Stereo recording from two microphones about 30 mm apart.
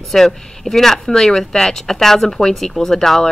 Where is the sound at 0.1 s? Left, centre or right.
Centre.